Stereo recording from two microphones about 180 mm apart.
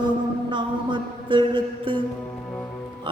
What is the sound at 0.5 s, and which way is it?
Mantra, 25° right (ahead or behind).